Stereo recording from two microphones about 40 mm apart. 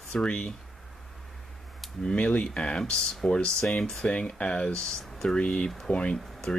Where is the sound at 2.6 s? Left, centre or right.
Left.